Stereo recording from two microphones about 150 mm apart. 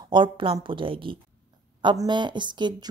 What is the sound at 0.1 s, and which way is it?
A woman's voice, 35° right (ahead or behind).